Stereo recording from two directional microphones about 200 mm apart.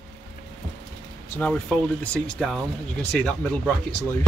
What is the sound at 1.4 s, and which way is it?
Speech, 5° left (ahead or behind).